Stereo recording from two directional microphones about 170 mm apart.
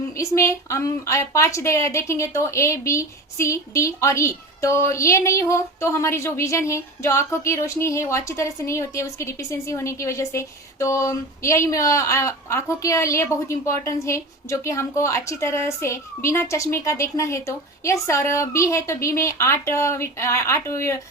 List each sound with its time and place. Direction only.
0.2 s a woman's voice: 15° left (ahead or behind)